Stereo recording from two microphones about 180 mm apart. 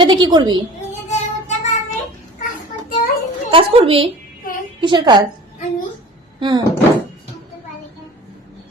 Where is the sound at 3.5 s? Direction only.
30° right (ahead or behind).